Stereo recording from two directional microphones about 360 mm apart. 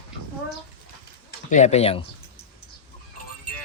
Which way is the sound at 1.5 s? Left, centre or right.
Centre.